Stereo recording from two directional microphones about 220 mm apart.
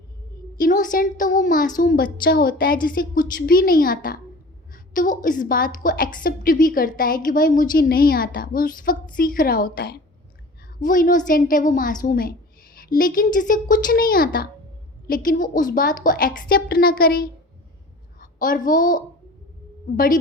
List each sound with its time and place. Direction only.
0.6 s a woman's voice: 35° left (ahead or behind)